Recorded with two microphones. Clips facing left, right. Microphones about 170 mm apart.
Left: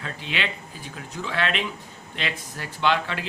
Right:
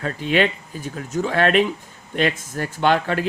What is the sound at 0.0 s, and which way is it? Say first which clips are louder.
Speech: right 11 dB; 45° right (ahead or behind).